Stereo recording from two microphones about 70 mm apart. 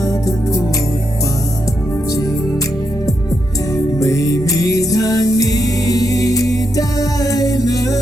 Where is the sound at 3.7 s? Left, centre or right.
Left.